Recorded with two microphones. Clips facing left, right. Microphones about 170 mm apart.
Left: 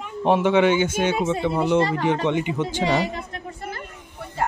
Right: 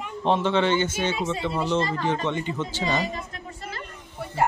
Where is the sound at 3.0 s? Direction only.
60° left (ahead or behind).